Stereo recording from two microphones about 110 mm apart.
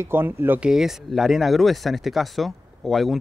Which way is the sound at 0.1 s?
20° right (ahead or behind).